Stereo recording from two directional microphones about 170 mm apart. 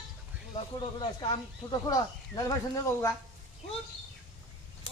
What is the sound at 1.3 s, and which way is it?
Speech, 25° left (ahead or behind).